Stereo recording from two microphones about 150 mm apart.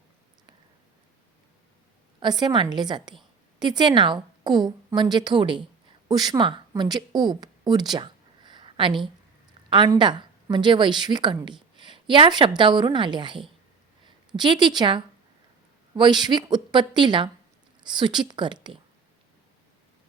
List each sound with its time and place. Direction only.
2.4 s a woman's voice: 30° right (ahead or behind)